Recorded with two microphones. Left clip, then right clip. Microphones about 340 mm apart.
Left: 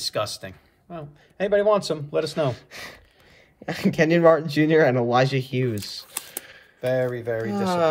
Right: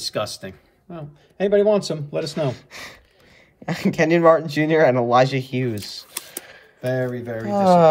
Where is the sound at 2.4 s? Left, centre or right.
Centre.